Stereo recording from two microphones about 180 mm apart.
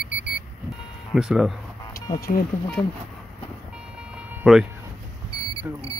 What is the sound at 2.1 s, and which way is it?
Speech, 55° left (ahead or behind).